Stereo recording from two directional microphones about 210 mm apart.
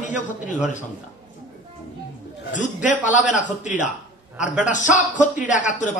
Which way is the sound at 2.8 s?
35° left (ahead or behind).